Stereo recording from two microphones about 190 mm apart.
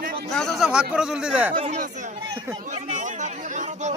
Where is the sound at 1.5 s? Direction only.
40° right (ahead or behind).